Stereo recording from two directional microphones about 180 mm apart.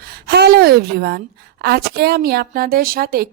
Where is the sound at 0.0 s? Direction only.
60° right (ahead or behind).